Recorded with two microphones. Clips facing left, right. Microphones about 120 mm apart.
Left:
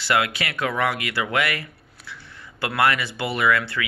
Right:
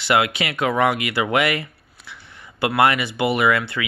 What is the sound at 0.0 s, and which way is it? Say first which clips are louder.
Speech: right 3 dB; 20° right (ahead or behind).